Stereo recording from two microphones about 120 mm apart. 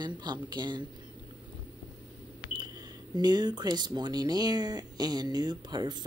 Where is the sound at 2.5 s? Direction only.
35° right (ahead or behind).